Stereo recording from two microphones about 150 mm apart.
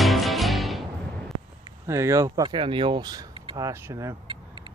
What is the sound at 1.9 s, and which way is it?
Speech, 20° right (ahead or behind).